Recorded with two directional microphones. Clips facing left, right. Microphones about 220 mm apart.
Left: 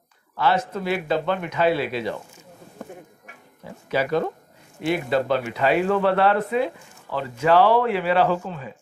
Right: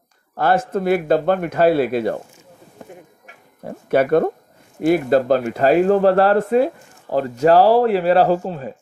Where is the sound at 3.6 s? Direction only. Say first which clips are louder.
Right 8 dB; 55° right (ahead or behind).